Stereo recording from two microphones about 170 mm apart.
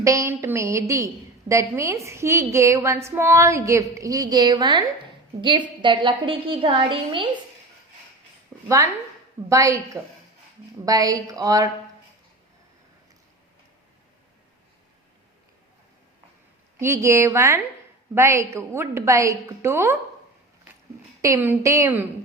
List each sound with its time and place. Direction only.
0.0 s a woman's voice: 20° right (ahead or behind)
8.6 s a woman's voice: 15° right (ahead or behind)
16.8 s a woman's voice: 15° right (ahead or behind)
21.2 s a woman's voice: 15° right (ahead or behind)